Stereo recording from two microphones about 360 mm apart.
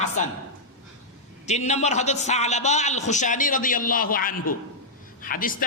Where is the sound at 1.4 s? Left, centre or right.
Centre.